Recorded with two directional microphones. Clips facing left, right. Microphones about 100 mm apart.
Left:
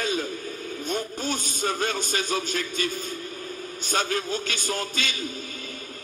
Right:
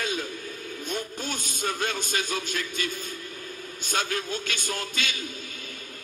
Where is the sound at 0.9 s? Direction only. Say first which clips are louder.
Left 4 dB; 50° left (ahead or behind).